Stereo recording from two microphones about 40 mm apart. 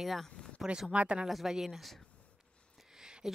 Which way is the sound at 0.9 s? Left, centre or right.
Right.